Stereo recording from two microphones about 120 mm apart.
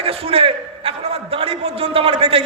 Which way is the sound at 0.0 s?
55° right (ahead or behind).